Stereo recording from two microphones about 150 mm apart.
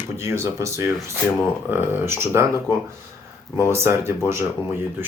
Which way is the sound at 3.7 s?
15° right (ahead or behind).